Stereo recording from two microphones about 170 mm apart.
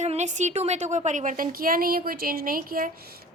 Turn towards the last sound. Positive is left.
turn(degrees=-65)  # may be behind; listen again after turning